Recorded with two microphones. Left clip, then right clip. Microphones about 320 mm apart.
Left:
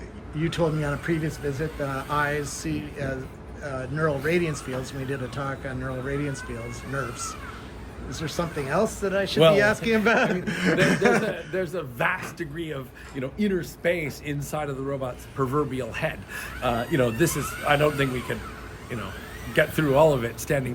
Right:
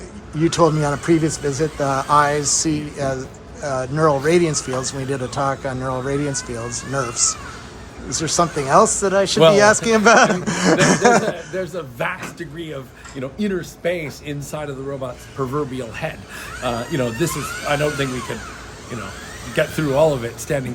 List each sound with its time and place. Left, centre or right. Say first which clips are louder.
0.4 s speech: right 10 dB; centre
11.5 s speech: right 3 dB; centre
19.5 s speech: right 3 dB; centre